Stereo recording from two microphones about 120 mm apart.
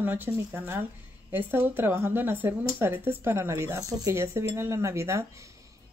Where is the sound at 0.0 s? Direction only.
15° right (ahead or behind).